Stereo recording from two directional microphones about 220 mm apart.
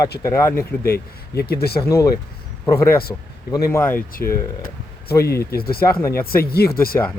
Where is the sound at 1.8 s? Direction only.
15° left (ahead or behind).